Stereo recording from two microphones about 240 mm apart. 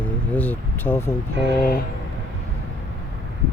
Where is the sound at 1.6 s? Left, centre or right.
Left.